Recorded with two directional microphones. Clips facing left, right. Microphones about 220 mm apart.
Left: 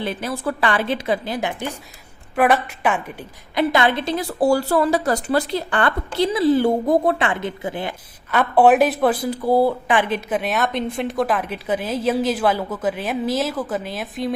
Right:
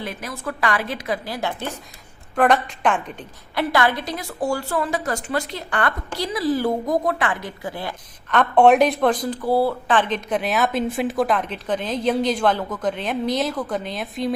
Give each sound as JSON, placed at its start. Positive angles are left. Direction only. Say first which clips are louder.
{"t": 0.0, "sound": "a woman's voice", "louder": "left 5 dB", "side_deg": 30}
{"t": 8.3, "sound": "speech", "louder": "even", "side_deg": 5}